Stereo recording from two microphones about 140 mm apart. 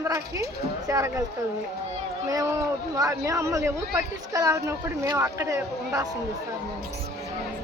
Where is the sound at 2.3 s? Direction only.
25° right (ahead or behind).